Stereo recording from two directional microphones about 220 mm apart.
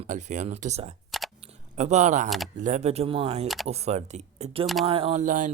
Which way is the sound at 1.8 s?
30° right (ahead or behind).